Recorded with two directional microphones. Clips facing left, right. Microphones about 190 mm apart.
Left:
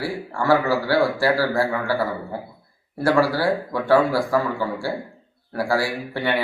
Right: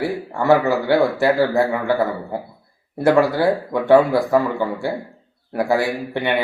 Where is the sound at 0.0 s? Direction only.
20° right (ahead or behind).